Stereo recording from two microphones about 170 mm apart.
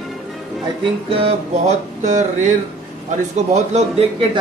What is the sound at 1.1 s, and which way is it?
Speech, 35° right (ahead or behind).